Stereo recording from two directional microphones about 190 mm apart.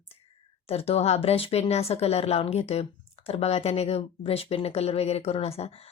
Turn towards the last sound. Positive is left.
turn(degrees=30)  # may be behind; listen again after turning